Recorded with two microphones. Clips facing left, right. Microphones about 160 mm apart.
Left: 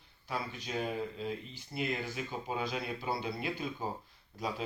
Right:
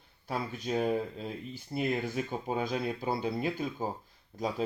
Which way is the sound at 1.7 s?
45° right (ahead or behind).